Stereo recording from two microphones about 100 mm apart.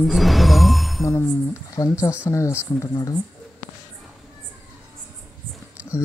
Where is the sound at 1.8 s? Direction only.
45° left (ahead or behind).